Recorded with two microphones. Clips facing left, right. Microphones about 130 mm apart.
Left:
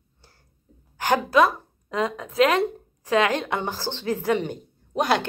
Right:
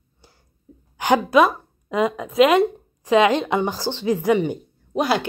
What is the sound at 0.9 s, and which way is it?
A woman's voice, 15° right (ahead or behind).